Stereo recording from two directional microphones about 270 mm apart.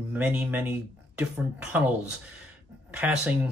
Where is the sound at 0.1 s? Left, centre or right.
Centre.